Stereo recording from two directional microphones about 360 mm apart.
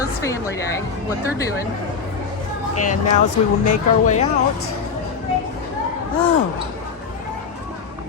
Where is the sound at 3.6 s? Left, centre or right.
Centre.